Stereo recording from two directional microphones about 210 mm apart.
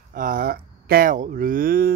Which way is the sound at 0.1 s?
40° right (ahead or behind).